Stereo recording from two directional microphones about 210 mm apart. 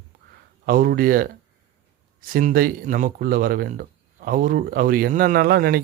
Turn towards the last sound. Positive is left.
turn(degrees=-45)  # may be behind; listen again after turning